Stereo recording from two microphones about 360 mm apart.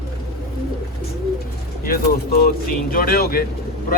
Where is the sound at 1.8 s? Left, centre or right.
Left.